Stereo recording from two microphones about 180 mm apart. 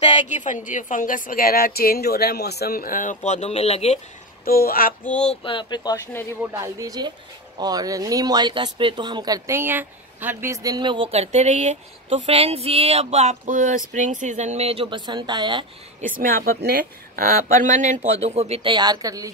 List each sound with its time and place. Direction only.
0.1 s a woman's voice: 45° left (ahead or behind)
4.5 s speech: 55° left (ahead or behind)
5.2 s speech: 30° left (ahead or behind)
6.4 s speech: 15° right (ahead or behind)
16.0 s speech: 50° right (ahead or behind); by 19.3 s 20° right (ahead or behind)